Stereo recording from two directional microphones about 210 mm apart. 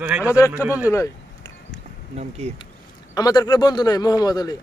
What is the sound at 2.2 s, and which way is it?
Speech, 30° right (ahead or behind).